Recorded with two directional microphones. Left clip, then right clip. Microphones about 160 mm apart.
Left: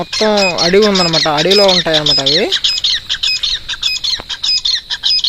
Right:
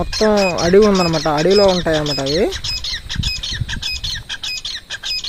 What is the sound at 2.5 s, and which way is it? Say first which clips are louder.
Squawk: left 10 dB; 90° right.